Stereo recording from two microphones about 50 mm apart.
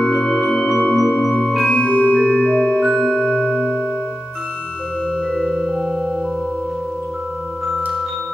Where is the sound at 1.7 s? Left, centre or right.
Left.